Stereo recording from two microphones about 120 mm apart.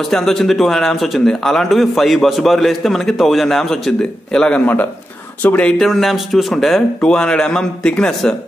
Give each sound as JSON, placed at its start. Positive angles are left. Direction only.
{"t": 0.1, "sound": "speech", "side_deg": 0}